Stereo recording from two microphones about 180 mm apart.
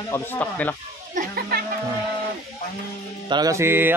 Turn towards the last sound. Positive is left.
turn(degrees=-10)  # may be behind; listen again after turning